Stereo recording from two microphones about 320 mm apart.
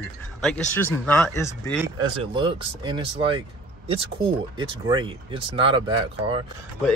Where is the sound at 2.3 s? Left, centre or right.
Centre.